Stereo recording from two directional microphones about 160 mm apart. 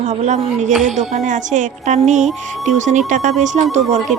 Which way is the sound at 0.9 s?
50° right (ahead or behind).